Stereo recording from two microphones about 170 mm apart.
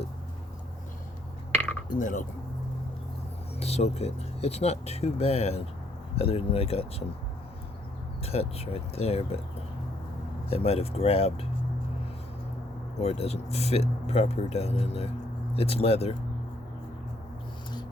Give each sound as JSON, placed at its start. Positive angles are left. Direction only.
{"t": 1.5, "sound": "chink", "side_deg": 10}
{"t": 1.9, "sound": "speech", "side_deg": 50}
{"t": 3.6, "sound": "speech", "side_deg": 40}
{"t": 8.2, "sound": "speech", "side_deg": 35}
{"t": 10.5, "sound": "speech", "side_deg": 35}
{"t": 13.0, "sound": "speech", "side_deg": 40}